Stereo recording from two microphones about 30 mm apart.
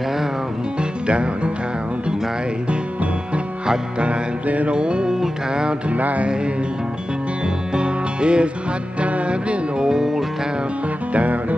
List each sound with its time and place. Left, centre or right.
0.7 s music: right
4.6 s music: right
5.9 s music: right
7.7 s music: right
9.8 s music: right